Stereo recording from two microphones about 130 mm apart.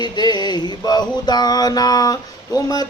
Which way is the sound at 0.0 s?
35° left (ahead or behind).